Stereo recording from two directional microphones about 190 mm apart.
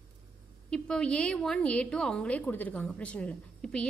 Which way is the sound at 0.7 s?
5° left (ahead or behind).